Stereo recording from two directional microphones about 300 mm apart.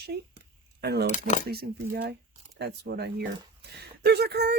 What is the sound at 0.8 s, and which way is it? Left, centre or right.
Speech, right.